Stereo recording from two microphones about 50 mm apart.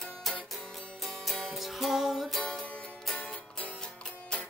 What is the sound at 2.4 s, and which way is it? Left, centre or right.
Music, centre.